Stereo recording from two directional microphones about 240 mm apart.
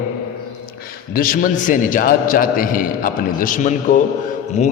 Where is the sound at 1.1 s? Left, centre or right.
Left.